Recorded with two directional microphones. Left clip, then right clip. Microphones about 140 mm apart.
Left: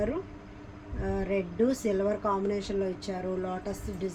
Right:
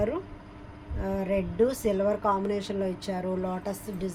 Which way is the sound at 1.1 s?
80° right.